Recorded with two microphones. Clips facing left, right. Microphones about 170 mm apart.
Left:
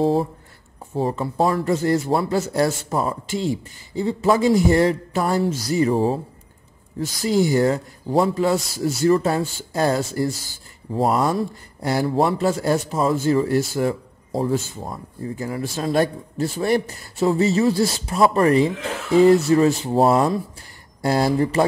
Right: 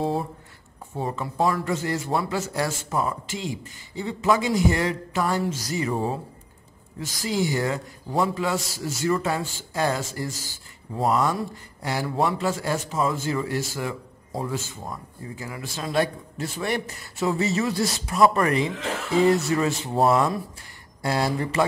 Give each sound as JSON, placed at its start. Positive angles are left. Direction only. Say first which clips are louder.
{"t": 0.0, "sound": "a man's voice", "louder": "left 7 dB", "side_deg": 30}
{"t": 7.2, "sound": "a man's voice", "louder": "left 7 dB", "side_deg": 40}